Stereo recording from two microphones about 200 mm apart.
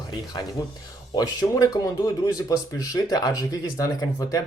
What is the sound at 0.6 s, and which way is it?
Speech, 20° left (ahead or behind).